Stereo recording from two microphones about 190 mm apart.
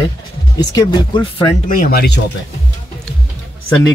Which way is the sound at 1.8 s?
55° left (ahead or behind).